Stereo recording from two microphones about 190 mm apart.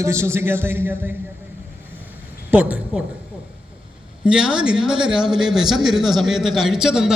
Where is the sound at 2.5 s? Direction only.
5° right (ahead or behind).